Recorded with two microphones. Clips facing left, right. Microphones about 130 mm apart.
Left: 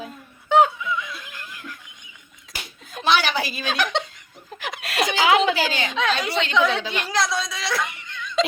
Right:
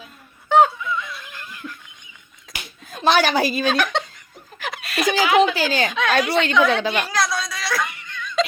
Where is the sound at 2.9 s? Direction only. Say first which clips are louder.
Right 4 dB; 45° right (ahead or behind).